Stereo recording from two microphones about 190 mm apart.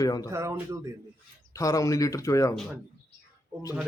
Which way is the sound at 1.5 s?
15° left (ahead or behind).